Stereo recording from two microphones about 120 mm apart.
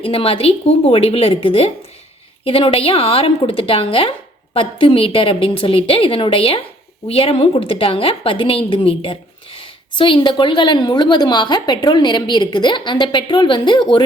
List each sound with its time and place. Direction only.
0.0 s a woman's voice: 50° left (ahead or behind)